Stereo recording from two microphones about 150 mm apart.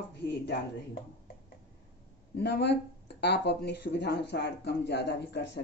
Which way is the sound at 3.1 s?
90° left.